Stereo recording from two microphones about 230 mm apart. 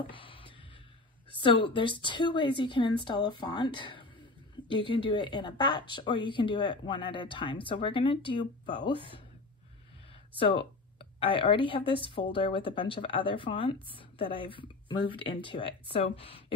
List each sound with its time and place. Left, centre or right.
0.1 s a sound: left
1.4 s speech: left
10.4 s speech: left